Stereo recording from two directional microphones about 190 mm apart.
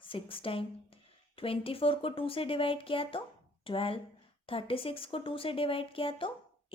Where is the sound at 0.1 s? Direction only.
30° left (ahead or behind).